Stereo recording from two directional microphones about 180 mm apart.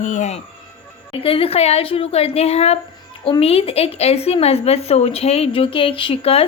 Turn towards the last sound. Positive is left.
turn(degrees=30)  # may be behind; listen again after turning